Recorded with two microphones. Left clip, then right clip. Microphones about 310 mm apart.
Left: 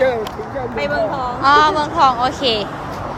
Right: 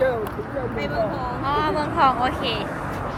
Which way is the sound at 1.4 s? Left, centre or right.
Centre.